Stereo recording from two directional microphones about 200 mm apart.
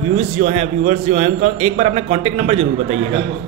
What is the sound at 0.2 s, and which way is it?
A man's voice, 35° right (ahead or behind).